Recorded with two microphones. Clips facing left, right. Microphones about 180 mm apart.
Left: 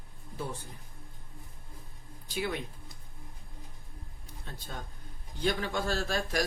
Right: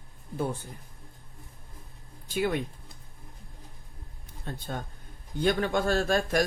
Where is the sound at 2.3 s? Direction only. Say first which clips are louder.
Right 6 dB; 50° right (ahead or behind).